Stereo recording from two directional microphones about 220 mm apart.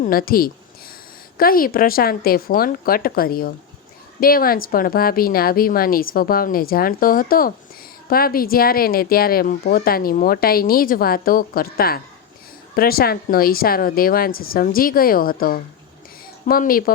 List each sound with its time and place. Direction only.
0.0 s speech: 40° left (ahead or behind)